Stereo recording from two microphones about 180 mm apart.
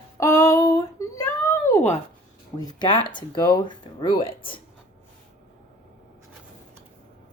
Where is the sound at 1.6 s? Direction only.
15° left (ahead or behind).